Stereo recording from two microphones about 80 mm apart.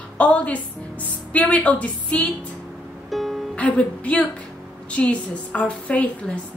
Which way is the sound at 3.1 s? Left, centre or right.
Centre.